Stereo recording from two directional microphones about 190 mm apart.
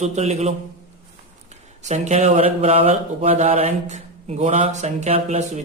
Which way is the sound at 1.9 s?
35° right (ahead or behind).